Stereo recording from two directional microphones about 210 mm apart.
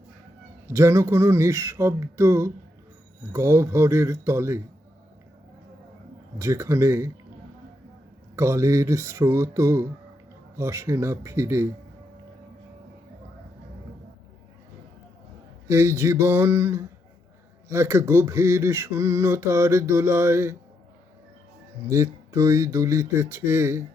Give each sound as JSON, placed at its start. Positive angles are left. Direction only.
{"t": 0.7, "sound": "speech", "side_deg": -15}
{"t": 6.4, "sound": "speech", "side_deg": -15}
{"t": 8.4, "sound": "speech", "side_deg": -15}
{"t": 15.6, "sound": "speech", "side_deg": -15}
{"t": 21.8, "sound": "speech", "side_deg": -15}